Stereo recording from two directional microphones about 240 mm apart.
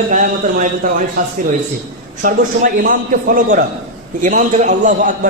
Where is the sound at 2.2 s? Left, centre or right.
Right.